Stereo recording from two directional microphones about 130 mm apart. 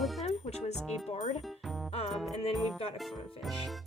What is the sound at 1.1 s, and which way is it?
Speech, 55° left (ahead or behind).